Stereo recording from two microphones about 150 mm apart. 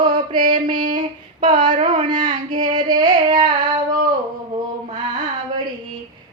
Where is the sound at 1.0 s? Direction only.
30° right (ahead or behind).